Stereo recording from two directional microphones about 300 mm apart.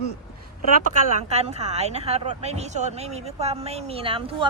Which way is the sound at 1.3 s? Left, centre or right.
Right.